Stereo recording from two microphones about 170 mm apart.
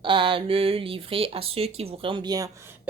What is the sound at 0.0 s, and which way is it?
Speech, 30° right (ahead or behind).